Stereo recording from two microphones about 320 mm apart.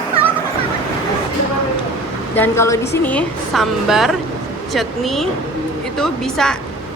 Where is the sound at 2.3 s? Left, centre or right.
Centre.